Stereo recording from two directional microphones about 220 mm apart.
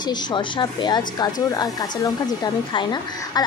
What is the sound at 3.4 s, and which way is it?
Duck, 20° left (ahead or behind).